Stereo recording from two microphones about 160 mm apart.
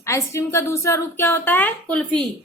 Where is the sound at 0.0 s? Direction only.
20° left (ahead or behind).